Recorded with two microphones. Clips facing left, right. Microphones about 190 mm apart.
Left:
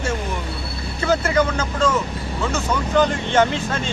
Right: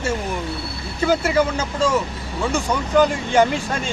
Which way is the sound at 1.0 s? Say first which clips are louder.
Right 1 dB; 10° right (ahead or behind).